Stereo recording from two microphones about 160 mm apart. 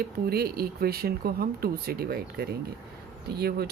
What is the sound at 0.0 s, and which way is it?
Speech, 75° right (ahead or behind).